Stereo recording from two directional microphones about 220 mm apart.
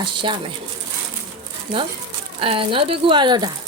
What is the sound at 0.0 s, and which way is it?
Speech, 20° right (ahead or behind).